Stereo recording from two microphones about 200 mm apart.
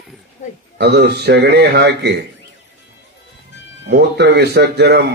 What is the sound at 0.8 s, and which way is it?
Speech, 55° right (ahead or behind).